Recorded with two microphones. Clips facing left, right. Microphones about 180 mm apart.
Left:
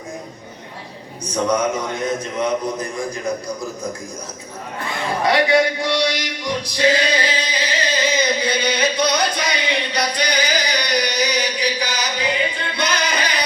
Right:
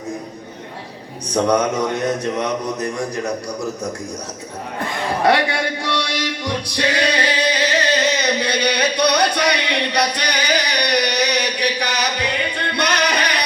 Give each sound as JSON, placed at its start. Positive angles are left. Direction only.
{"t": 1.3, "sound": "speech", "side_deg": -65}
{"t": 5.2, "sound": "speech", "side_deg": -60}
{"t": 6.4, "sound": "music", "side_deg": -65}